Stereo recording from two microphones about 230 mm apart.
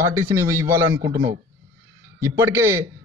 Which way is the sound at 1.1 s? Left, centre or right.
Right.